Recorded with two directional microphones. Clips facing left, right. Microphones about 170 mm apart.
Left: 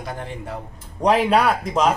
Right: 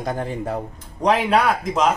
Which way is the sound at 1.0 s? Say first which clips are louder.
Even; 10° left (ahead or behind).